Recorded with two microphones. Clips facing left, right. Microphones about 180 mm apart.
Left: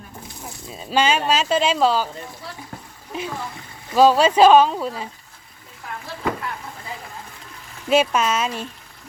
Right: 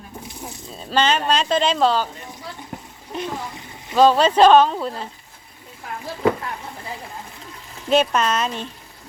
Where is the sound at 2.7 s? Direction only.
20° right (ahead or behind).